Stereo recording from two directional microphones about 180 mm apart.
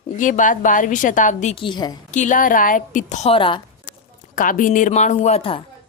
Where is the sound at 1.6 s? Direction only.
25° left (ahead or behind).